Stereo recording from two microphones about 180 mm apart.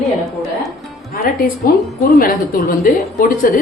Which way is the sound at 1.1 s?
60° left (ahead or behind).